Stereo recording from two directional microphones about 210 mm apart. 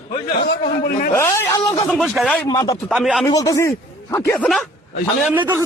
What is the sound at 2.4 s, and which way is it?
Speech, 15° left (ahead or behind).